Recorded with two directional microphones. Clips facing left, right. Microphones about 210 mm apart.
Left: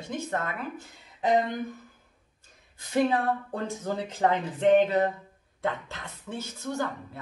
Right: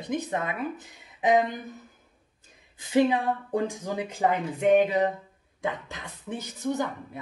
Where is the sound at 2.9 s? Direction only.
15° right (ahead or behind).